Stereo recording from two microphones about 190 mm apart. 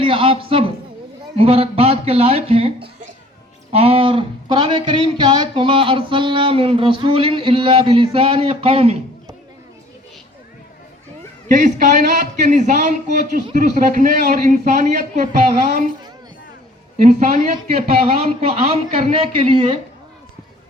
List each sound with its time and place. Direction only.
0.0 s a man's voice: 30° right (ahead or behind)
11.4 s a man's voice: 40° right (ahead or behind)
17.5 s speech: 30° right (ahead or behind)